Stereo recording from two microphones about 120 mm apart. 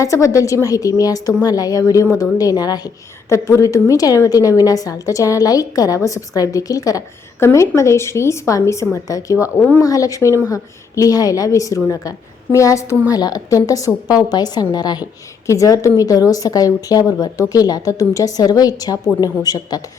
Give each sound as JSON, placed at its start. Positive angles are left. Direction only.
{"t": 0.0, "sound": "a woman's voice", "side_deg": 25}
{"t": 9.6, "sound": "speech", "side_deg": 10}
{"t": 9.8, "sound": "a woman's voice", "side_deg": 30}